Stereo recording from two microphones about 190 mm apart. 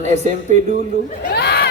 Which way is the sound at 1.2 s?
60° left (ahead or behind).